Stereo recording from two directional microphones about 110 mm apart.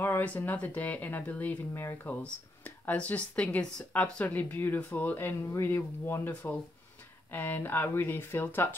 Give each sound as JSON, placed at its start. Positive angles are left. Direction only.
{"t": 0.0, "sound": "speech", "side_deg": 15}